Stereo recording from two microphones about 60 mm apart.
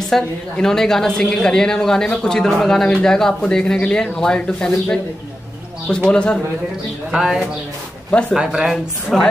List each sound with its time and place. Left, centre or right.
0.1 s a woman's voice: centre
6.0 s a woman's voice: centre
7.1 s a man's voice: centre